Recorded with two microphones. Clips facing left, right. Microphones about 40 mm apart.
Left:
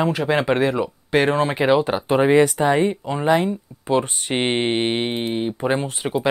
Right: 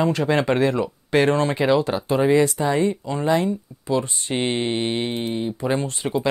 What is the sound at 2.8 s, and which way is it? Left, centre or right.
Speech, left.